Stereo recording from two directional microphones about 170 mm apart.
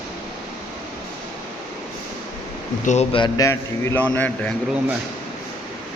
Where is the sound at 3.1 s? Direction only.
25° left (ahead or behind); by 4.5 s 10° left (ahead or behind).